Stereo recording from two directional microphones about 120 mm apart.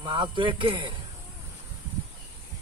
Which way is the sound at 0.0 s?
40° right (ahead or behind).